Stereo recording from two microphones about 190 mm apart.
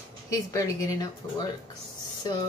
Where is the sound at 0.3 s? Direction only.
20° left (ahead or behind).